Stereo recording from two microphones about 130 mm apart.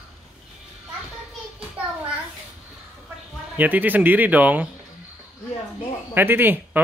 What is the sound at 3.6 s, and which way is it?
Speech, 15° right (ahead or behind).